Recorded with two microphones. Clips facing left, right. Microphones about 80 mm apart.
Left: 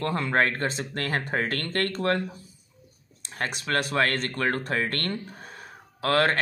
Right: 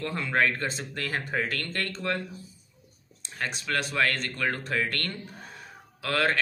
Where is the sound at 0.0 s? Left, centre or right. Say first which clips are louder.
Left 2 dB; left.